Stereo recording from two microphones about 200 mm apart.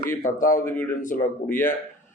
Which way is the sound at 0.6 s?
10° left (ahead or behind).